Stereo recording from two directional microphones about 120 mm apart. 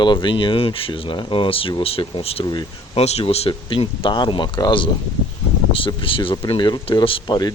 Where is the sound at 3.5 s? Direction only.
45° left (ahead or behind).